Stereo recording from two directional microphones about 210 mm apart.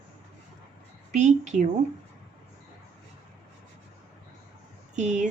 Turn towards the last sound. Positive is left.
turn(degrees=-35)  # may be behind; listen again after turning